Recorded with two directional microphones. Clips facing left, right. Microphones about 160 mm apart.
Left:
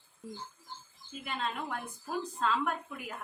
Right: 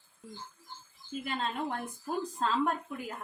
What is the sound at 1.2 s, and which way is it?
A woman's voice, 40° right (ahead or behind).